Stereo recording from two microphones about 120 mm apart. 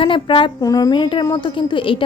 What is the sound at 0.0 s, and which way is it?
Speech, 45° left (ahead or behind).